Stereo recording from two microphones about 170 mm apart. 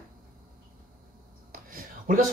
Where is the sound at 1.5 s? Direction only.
55° right (ahead or behind).